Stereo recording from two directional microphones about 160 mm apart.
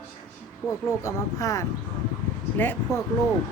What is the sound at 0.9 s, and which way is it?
Speech, 20° left (ahead or behind).